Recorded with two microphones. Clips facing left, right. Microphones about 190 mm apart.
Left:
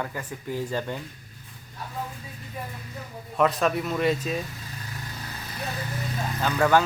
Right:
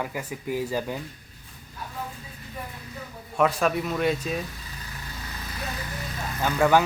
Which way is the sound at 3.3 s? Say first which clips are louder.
Even; centre (ahead or behind).